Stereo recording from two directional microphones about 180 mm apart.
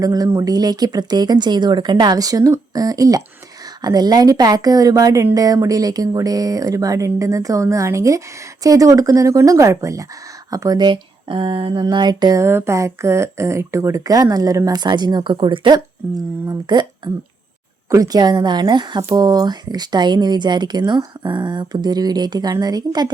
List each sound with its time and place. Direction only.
0.0 s speech: 20° right (ahead or behind)
17.9 s speech: 20° right (ahead or behind)